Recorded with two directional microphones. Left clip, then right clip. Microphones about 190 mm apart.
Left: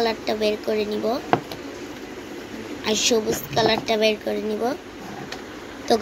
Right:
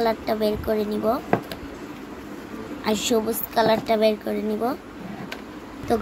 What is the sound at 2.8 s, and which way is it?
A woman's voice, 40° right (ahead or behind).